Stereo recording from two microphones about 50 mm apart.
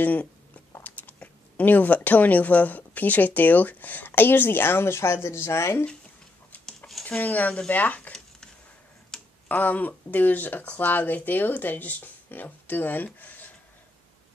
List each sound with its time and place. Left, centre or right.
0.0 s speech: left
7.1 s speech: left
9.1 s tick-tock: centre
9.5 s speech: left